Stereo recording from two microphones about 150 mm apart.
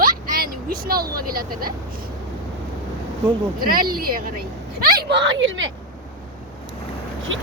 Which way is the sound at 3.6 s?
75° right (ahead or behind).